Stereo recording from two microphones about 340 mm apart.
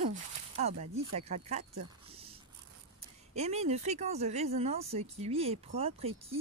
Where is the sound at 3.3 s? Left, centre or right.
Centre.